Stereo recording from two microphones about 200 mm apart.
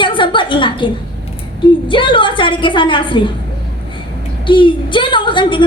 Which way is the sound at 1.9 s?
25° left (ahead or behind).